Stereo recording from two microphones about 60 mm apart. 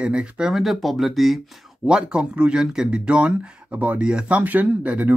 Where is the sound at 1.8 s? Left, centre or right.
Centre.